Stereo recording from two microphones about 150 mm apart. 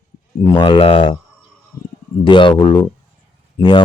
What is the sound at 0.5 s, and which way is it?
Speech, 35° left (ahead or behind).